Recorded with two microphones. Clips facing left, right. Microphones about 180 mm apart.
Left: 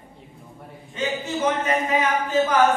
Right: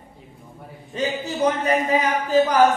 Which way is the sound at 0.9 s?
35° right (ahead or behind).